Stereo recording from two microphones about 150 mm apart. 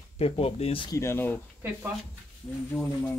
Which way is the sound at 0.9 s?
20° left (ahead or behind).